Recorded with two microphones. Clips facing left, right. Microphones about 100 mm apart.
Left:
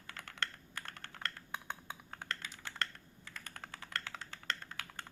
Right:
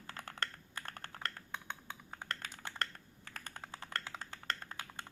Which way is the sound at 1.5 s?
10° left (ahead or behind).